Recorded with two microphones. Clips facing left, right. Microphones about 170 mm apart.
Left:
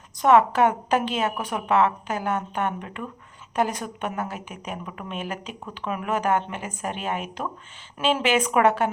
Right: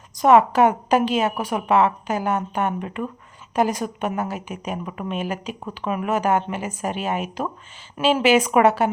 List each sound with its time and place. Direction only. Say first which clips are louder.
0.2 s a woman's voice: right 3 dB; 10° right (ahead or behind)